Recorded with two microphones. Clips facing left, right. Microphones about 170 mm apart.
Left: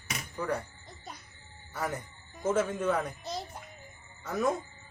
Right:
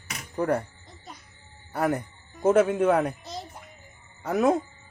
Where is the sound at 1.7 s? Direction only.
60° right (ahead or behind).